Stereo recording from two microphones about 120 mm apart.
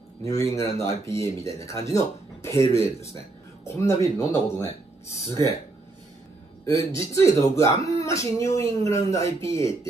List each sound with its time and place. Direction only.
0.2 s speech: 25° left (ahead or behind)
3.6 s speech: 25° left (ahead or behind)
6.8 s speech: 25° left (ahead or behind)